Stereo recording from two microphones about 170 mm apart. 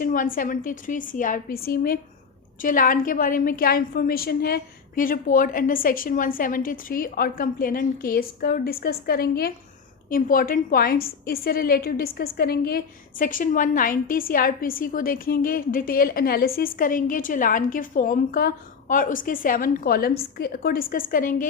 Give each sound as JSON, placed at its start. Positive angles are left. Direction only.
{"t": 0.0, "sound": "a woman's voice", "side_deg": 55}